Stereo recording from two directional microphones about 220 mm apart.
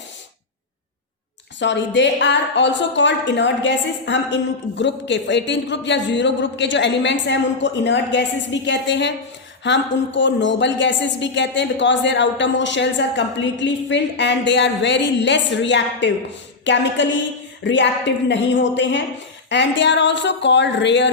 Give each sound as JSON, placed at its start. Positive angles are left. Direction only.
{"t": 1.5, "sound": "speech", "side_deg": 55}